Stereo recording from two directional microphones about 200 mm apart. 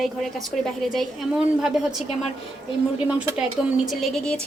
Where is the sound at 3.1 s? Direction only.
5° right (ahead or behind).